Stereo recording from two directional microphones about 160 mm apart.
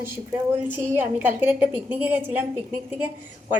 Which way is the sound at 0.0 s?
15° right (ahead or behind).